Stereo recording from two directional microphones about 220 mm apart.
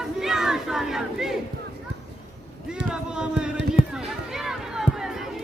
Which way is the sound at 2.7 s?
5° right (ahead or behind).